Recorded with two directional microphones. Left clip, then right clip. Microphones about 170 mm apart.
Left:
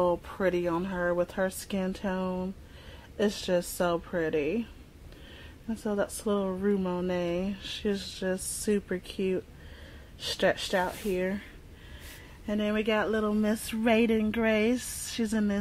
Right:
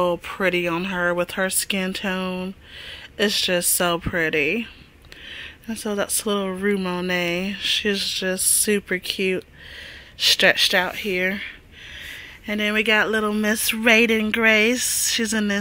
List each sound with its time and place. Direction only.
0.0 s speech: 20° right (ahead or behind)
5.9 s speech: 10° right (ahead or behind)
12.4 s speech: 10° right (ahead or behind)